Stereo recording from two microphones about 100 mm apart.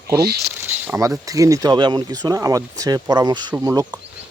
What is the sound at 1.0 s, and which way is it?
Speech, 35° right (ahead or behind).